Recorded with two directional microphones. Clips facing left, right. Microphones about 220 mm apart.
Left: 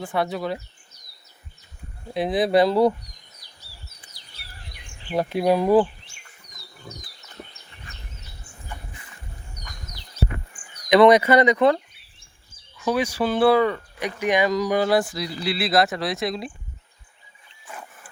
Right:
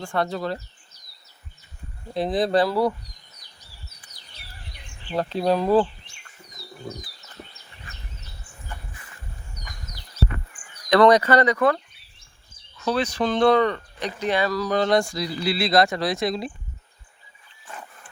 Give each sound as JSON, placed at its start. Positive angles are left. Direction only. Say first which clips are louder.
{"t": 0.0, "sound": "speech", "louder": "even", "side_deg": 5}
{"t": 2.1, "sound": "speech", "louder": "left 1 dB", "side_deg": 0}
{"t": 2.6, "sound": "speech", "louder": "left 5 dB", "side_deg": 20}
{"t": 5.1, "sound": "speech", "louder": "left 2 dB", "side_deg": 15}
{"t": 10.8, "sound": "speech", "louder": "left 2 dB", "side_deg": 15}